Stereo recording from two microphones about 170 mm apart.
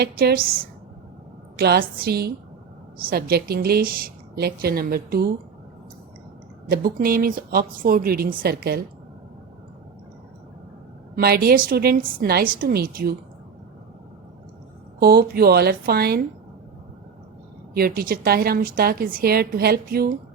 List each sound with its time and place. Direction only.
0.0 s a woman's voice: 65° right (ahead or behind)
1.5 s a woman's voice: 70° right (ahead or behind)
6.7 s a woman's voice: 60° right (ahead or behind)
11.1 s a woman's voice: 60° right (ahead or behind)
14.9 s a woman's voice: 65° right (ahead or behind)
17.7 s a woman's voice: 60° right (ahead or behind)